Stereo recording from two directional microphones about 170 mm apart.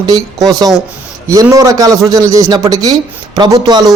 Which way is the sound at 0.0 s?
20° right (ahead or behind).